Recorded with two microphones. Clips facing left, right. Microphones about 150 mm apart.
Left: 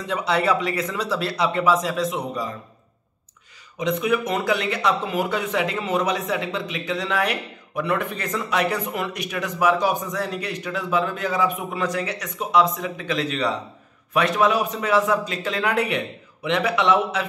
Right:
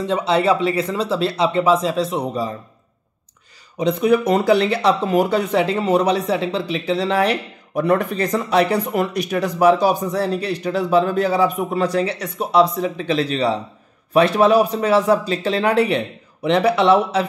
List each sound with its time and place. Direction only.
0.0 s speech: 25° right (ahead or behind)
3.7 s speech: 35° right (ahead or behind)